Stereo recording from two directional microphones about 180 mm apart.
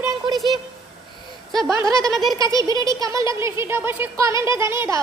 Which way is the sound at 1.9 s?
20° right (ahead or behind).